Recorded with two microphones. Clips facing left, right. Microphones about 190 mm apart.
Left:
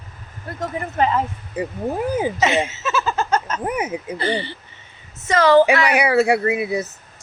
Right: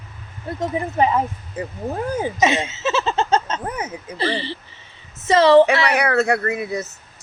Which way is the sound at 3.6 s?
15° left (ahead or behind).